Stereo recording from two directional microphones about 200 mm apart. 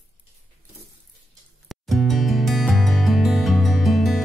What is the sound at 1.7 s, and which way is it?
Music, centre (ahead or behind).